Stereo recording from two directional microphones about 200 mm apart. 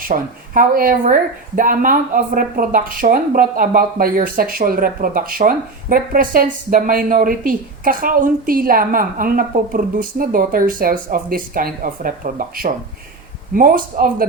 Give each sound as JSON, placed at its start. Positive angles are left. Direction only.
{"t": 0.1, "sound": "a woman's voice", "side_deg": -45}